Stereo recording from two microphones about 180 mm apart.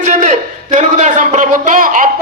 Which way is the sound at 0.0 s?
45° right (ahead or behind).